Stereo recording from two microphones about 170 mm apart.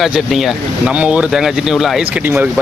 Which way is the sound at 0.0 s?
Centre (ahead or behind).